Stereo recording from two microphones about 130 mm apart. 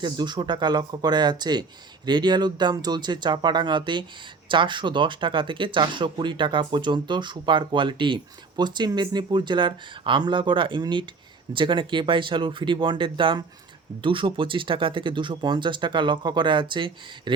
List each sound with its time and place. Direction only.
0.0 s speech: 35° right (ahead or behind)